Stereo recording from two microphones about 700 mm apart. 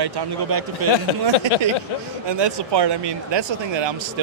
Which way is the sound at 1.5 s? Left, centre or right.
Left.